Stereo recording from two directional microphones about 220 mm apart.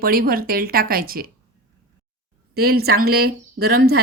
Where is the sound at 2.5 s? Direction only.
45° right (ahead or behind).